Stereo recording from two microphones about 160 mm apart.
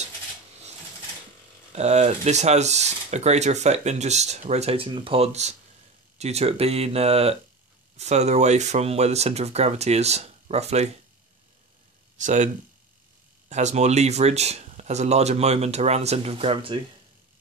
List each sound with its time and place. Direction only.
1.7 s speech: 45° right (ahead or behind)
12.2 s speech: 50° right (ahead or behind)
13.5 s speech: 45° right (ahead or behind)